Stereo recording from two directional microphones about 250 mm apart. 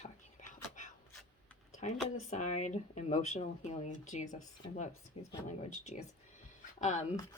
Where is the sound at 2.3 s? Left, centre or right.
Left.